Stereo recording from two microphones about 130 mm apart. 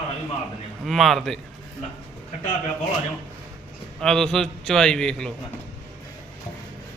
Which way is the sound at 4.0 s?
5° left (ahead or behind).